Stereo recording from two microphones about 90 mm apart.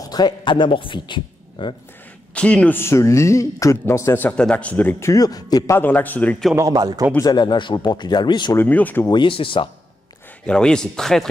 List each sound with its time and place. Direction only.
0.0 s a man's voice: 50° left (ahead or behind)
2.3 s speech: 15° left (ahead or behind)
2.8 s speech: 35° left (ahead or behind)
4.2 s speech: 15° left (ahead or behind)
5.0 s a man's voice: 45° left (ahead or behind)
5.7 s a man's voice: 20° left (ahead or behind)
6.5 s a man's voice: 40° right (ahead or behind)
7.2 s speech: 55° left (ahead or behind)
8.5 s a man's voice: 20° left (ahead or behind)
9.0 s speech: 60° left (ahead or behind)
10.4 s speech: 10° left (ahead or behind)